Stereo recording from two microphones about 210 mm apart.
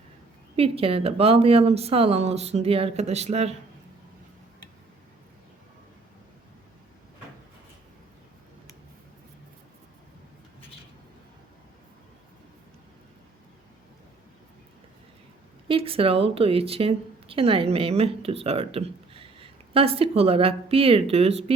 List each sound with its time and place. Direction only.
0.5 s a woman's voice: 25° right (ahead or behind)
15.6 s speech: 25° right (ahead or behind)